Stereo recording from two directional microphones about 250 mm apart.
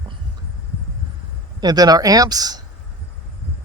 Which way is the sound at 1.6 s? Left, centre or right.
Centre.